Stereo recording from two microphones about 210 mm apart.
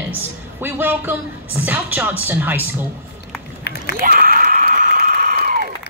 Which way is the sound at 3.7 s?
50° left (ahead or behind).